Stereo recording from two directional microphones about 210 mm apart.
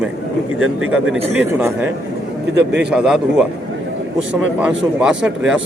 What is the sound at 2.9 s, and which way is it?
Speech, 5° right (ahead or behind).